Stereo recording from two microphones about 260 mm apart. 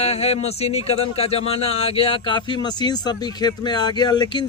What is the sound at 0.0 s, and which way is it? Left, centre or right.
Speech, left.